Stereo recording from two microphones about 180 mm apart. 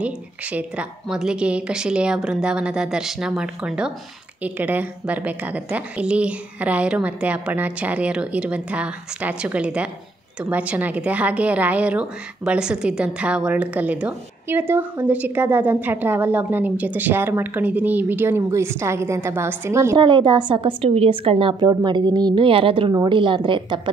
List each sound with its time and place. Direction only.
0.0 s a woman's voice: 5° right (ahead or behind)
20.0 s a woman's voice: 25° right (ahead or behind)